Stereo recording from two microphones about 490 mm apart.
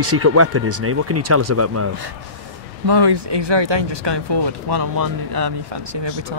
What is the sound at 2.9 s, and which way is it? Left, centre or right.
Speech, right.